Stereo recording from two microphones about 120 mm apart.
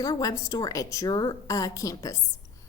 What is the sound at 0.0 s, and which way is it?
A woman's voice, 30° left (ahead or behind).